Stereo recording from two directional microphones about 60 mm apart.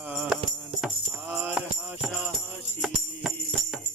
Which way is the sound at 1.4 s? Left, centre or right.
Right.